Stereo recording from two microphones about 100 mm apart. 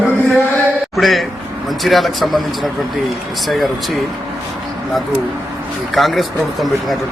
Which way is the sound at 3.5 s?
Centre (ahead or behind).